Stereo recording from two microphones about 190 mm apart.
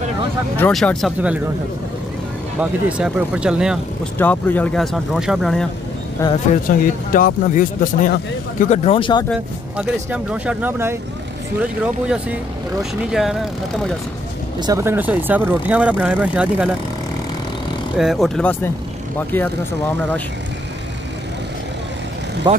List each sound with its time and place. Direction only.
0.6 s speech: 5° left (ahead or behind)
2.6 s speech: 5° right (ahead or behind)
4.2 s speech: 10° left (ahead or behind)
6.2 s speech: 15° left (ahead or behind)
6.7 s speech: 50° left (ahead or behind); by 9.2 s 25° left (ahead or behind)
9.8 s speech: 5° right (ahead or behind)
14.6 s speech: 15° right (ahead or behind)
17.9 s speech: centre (ahead or behind)
22.5 s speech: 25° right (ahead or behind)